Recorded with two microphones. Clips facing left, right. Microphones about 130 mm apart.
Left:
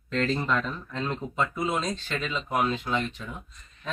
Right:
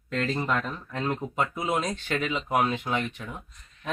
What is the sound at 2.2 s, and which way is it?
Speech, 15° right (ahead or behind).